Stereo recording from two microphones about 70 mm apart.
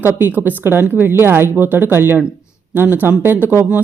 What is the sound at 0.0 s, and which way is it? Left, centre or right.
A woman's voice, right.